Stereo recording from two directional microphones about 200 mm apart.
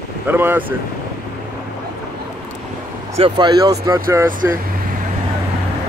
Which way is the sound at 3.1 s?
25° right (ahead or behind).